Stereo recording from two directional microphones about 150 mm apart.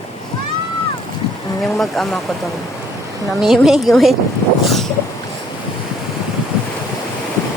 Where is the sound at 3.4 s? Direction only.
Centre (ahead or behind).